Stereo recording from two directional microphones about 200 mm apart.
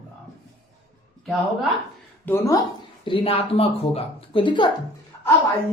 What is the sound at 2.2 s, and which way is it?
A woman's voice, 15° left (ahead or behind).